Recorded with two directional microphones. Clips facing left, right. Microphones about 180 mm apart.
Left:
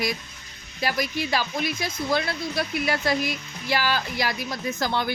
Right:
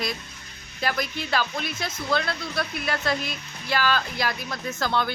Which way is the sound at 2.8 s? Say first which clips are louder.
Left 4 dB; 10° left (ahead or behind).